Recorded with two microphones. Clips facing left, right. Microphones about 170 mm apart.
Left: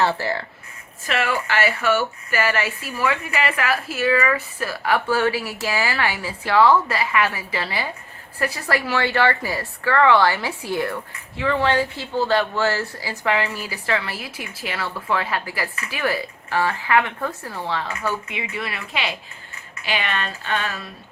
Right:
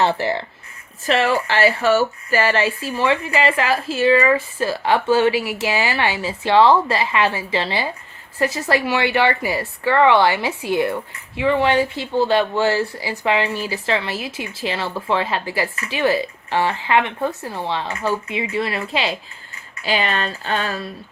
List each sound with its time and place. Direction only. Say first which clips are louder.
0.0 s a woman's voice: right 3 dB; 20° right (ahead or behind)
1.0 s a woman's voice: right 5 dB; 30° right (ahead or behind)
18.3 s speech: right 7 dB; 30° right (ahead or behind)